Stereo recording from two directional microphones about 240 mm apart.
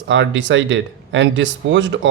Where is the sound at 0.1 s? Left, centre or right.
Right.